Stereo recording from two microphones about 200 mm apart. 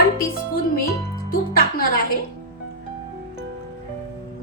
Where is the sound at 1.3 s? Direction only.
45° left (ahead or behind).